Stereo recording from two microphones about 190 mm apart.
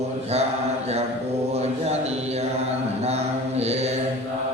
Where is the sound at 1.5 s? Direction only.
35° right (ahead or behind).